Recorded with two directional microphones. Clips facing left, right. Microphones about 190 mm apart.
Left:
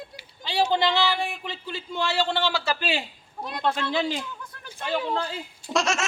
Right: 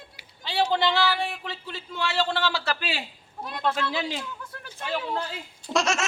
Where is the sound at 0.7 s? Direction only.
Centre (ahead or behind).